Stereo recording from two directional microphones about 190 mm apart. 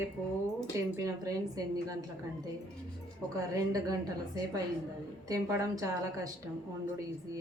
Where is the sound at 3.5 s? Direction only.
20° right (ahead or behind).